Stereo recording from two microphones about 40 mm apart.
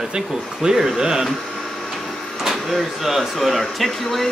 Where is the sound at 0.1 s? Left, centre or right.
Centre.